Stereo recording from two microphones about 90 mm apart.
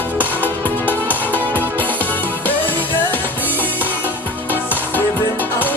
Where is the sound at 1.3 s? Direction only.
20° left (ahead or behind).